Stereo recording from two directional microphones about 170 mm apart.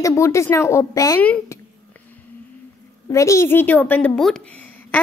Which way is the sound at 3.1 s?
15° left (ahead or behind).